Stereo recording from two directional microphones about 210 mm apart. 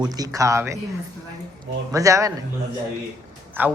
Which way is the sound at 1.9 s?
15° right (ahead or behind).